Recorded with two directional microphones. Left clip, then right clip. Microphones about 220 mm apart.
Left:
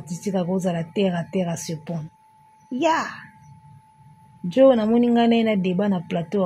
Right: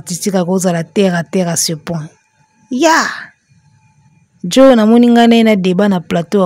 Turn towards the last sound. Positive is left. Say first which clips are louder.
# right 11 dB
turn(degrees=-45)  # may be behind; listen again after turning